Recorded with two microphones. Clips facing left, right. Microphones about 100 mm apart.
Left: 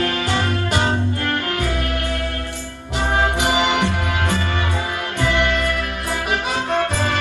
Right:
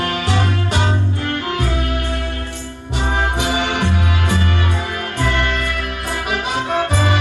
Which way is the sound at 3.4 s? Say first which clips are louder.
Left 1 dB; 75° left (ahead or behind).